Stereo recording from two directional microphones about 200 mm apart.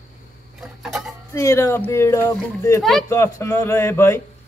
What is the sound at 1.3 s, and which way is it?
A man's voice, 15° left (ahead or behind).